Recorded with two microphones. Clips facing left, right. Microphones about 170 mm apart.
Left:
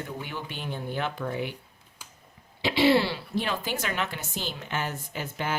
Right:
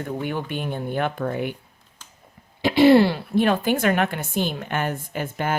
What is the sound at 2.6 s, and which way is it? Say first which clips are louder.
A woman's voice: right 8 dB; 50° right (ahead or behind).